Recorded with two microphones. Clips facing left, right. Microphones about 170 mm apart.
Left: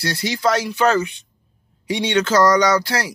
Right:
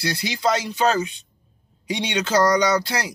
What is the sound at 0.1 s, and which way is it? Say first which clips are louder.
Speech: left 4 dB; 15° right (ahead or behind).